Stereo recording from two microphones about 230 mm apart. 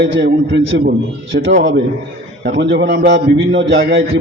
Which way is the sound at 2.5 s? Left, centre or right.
Right.